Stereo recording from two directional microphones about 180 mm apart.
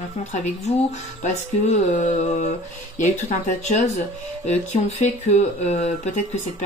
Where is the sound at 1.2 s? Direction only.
40° left (ahead or behind).